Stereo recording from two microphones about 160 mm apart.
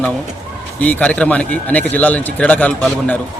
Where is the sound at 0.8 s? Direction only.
10° left (ahead or behind).